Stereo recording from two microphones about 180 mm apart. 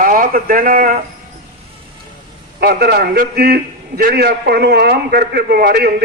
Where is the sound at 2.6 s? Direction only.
60° right (ahead or behind).